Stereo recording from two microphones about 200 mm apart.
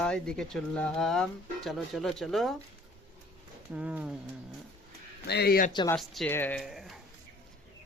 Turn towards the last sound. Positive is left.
turn(degrees=0)  # may be behind; listen again after turning